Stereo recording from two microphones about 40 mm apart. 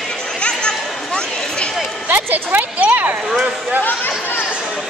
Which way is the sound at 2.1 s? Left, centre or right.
Right.